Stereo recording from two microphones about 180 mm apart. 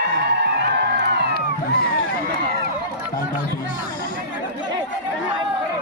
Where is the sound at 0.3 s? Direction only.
70° right (ahead or behind).